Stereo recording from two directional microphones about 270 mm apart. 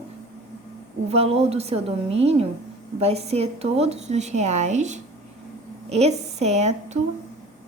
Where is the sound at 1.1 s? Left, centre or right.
Right.